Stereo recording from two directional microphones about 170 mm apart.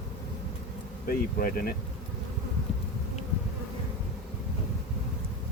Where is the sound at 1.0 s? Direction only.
60° left (ahead or behind).